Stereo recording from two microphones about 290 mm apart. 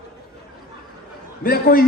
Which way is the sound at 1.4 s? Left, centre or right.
Left.